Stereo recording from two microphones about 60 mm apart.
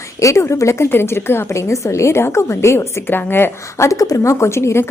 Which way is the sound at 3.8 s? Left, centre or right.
Left.